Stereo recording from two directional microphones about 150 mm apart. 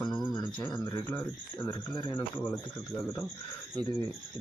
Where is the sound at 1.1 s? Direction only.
15° left (ahead or behind).